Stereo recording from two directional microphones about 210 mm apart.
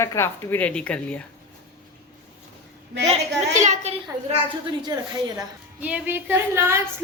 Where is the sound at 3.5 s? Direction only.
35° right (ahead or behind).